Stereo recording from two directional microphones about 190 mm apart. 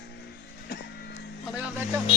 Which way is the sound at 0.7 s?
60° left (ahead or behind).